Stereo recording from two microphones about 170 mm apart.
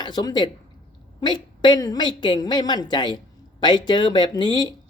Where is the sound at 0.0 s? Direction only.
25° left (ahead or behind).